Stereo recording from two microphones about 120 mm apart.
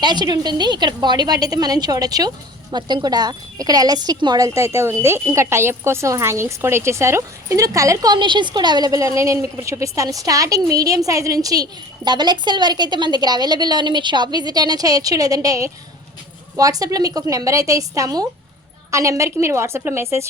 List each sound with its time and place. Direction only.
0.0 s a woman's voice: 35° right (ahead or behind); by 20.2 s 20° right (ahead or behind)